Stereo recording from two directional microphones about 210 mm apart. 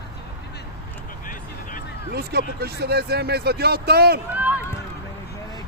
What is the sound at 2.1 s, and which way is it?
Speech, 50° right (ahead or behind).